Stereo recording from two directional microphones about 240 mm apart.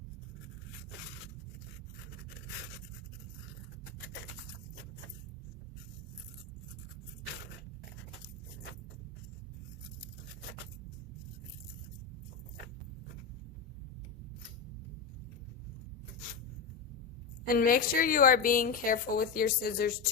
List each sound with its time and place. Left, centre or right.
17.4 s a woman's voice: left